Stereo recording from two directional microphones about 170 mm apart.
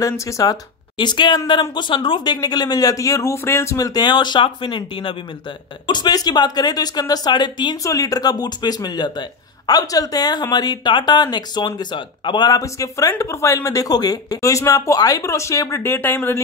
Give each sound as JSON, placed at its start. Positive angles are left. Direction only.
{"t": 0.0, "sound": "speech", "side_deg": 20}